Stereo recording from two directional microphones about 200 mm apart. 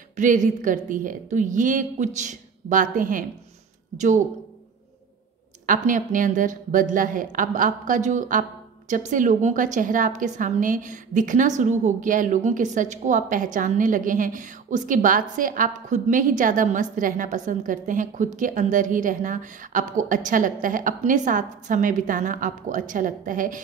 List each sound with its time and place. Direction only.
0.1 s a woman's voice: 40° right (ahead or behind)
5.7 s a woman's voice: 40° right (ahead or behind)